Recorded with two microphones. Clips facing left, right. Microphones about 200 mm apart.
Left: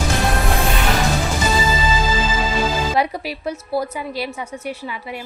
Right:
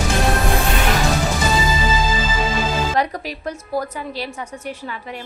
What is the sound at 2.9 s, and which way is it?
A woman's voice, 10° left (ahead or behind).